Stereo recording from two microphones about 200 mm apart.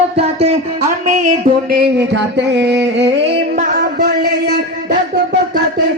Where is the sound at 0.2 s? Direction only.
30° right (ahead or behind); by 3.1 s 60° right (ahead or behind).